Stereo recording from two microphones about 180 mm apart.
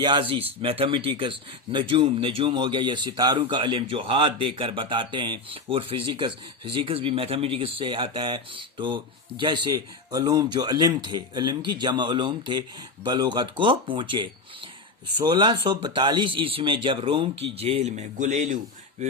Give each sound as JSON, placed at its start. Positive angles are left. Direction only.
{"t": 0.0, "sound": "speech", "side_deg": -25}